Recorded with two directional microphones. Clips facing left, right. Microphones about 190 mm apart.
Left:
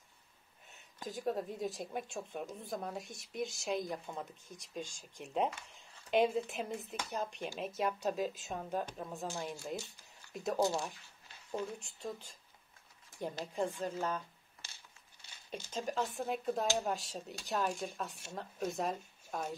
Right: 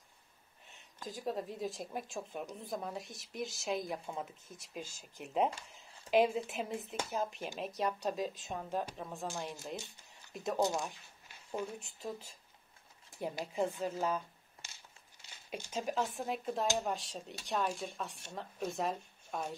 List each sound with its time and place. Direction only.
1.0 s a woman's voice: centre (ahead or behind)
10.6 s speech: 15° right (ahead or behind)
11.8 s a woman's voice: 5° right (ahead or behind)
15.7 s a woman's voice: 5° right (ahead or behind)